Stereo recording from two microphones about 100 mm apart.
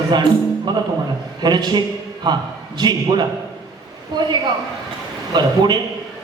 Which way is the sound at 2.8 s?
45° right (ahead or behind).